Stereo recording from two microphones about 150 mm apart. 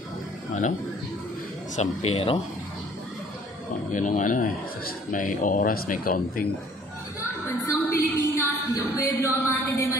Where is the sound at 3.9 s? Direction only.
55° left (ahead or behind).